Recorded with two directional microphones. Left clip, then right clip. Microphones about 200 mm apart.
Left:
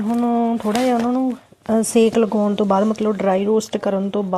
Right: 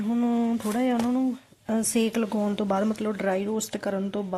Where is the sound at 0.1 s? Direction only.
15° right (ahead or behind).